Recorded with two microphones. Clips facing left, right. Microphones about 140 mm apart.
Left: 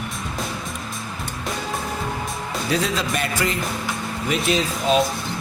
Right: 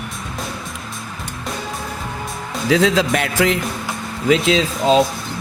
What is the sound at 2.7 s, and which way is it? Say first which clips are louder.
Speech: right 8 dB; 90° right.